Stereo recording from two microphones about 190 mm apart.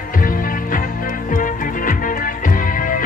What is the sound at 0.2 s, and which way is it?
Music, 45° left (ahead or behind).